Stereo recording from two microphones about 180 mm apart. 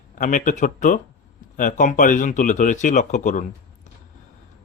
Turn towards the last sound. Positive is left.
turn(degrees=45)  # may be behind; listen again after turning